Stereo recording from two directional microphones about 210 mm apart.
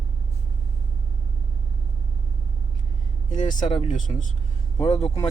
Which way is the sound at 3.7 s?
35° left (ahead or behind).